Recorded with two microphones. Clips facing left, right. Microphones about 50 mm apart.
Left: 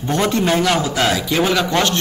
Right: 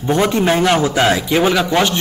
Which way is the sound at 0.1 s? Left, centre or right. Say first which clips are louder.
Right 3 dB; centre.